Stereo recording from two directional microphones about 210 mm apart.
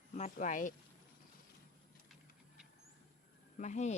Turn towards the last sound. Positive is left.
turn(degrees=35)  # may be behind; listen again after turning